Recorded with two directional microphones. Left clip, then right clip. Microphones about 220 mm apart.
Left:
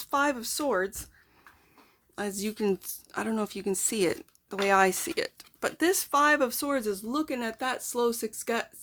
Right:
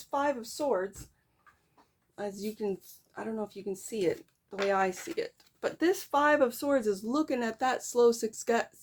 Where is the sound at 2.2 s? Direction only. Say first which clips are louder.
Left 4 dB; 35° left (ahead or behind).